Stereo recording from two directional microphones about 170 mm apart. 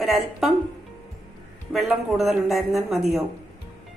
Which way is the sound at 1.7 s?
Centre (ahead or behind).